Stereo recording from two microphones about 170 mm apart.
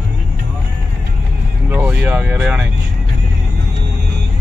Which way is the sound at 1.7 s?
10° right (ahead or behind).